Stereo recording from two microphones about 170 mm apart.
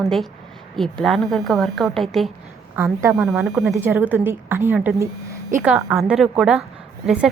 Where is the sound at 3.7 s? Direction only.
15° right (ahead or behind).